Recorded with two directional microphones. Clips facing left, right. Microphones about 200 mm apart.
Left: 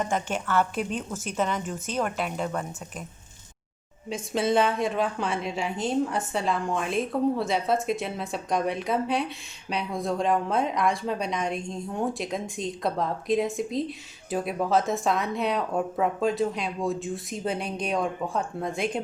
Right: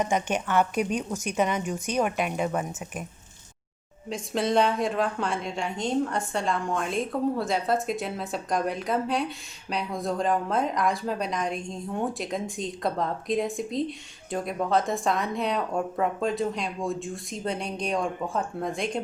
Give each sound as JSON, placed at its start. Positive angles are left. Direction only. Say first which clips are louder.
{"t": 0.0, "sound": "a woman's voice", "louder": "right 2 dB", "side_deg": -15}
{"t": 4.1, "sound": "a woman's voice", "louder": "left 1 dB", "side_deg": 0}